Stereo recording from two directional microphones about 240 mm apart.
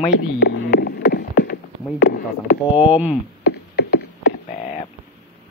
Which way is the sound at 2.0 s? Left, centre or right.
Left.